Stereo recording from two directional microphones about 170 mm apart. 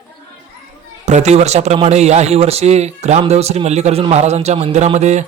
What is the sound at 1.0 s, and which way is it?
A man's voice, 45° right (ahead or behind).